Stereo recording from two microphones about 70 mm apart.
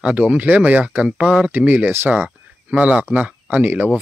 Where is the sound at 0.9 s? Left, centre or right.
Centre.